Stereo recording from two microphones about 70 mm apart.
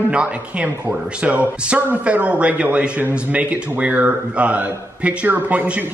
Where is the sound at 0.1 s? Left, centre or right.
Centre.